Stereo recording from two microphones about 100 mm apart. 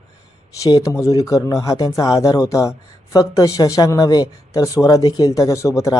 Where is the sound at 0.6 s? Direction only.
35° left (ahead or behind).